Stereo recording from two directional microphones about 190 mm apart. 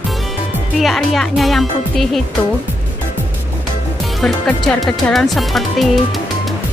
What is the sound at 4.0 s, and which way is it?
Speech, centre (ahead or behind).